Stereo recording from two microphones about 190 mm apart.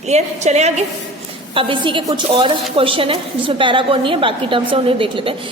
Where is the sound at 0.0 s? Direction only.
35° right (ahead or behind).